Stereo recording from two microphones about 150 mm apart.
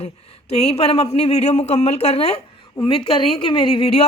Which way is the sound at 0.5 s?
45° left (ahead or behind).